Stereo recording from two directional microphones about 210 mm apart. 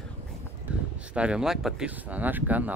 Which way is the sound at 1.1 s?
5° right (ahead or behind).